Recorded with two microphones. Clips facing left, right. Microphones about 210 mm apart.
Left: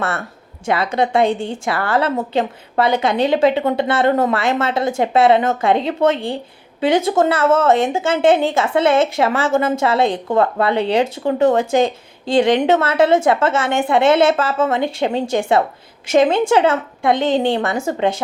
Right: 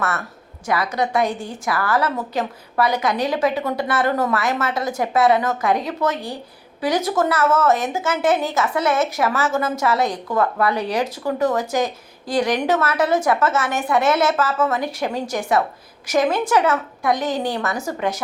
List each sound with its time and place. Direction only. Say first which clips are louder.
0.0 s a woman's voice: left 2 dB; 30° left (ahead or behind)